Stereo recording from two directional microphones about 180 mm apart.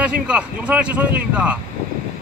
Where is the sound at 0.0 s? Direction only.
5° right (ahead or behind).